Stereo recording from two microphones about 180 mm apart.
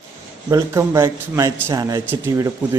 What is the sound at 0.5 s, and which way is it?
Speech, 15° right (ahead or behind).